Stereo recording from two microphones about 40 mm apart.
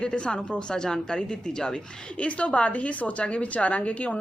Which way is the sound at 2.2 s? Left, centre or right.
Left.